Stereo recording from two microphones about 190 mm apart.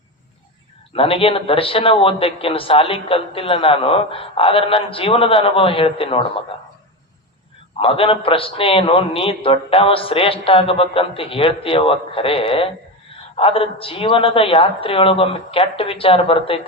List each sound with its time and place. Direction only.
0.9 s a man's voice: 30° left (ahead or behind)
7.8 s a man's voice: 30° left (ahead or behind)